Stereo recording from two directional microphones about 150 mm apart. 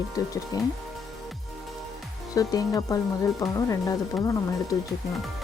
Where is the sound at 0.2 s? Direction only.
25° left (ahead or behind).